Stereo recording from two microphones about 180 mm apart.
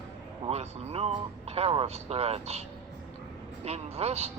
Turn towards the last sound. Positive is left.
turn(degrees=-35)  # may be behind; listen again after turning